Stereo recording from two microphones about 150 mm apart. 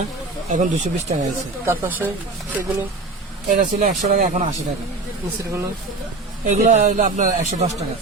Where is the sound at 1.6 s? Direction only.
15° right (ahead or behind).